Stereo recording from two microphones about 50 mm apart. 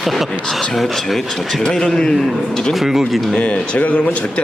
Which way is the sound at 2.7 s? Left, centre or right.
Centre.